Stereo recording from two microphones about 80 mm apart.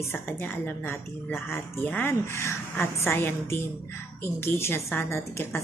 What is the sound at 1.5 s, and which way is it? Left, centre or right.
A woman's voice, left.